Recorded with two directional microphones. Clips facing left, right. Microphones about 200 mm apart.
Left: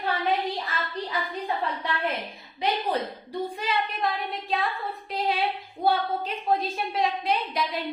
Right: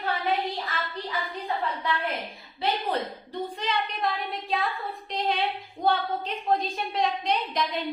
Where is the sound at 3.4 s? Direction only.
5° left (ahead or behind).